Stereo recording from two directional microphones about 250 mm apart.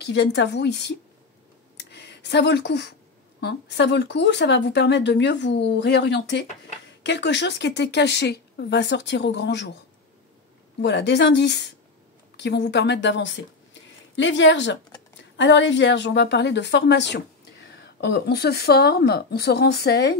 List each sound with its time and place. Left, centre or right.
0.0 s speech: left
1.8 s a sound: left
3.3 s speech: left
10.8 s speech: left